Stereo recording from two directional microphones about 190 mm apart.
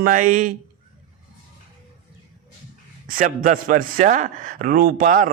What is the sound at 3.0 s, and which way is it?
A man's voice, 45° right (ahead or behind).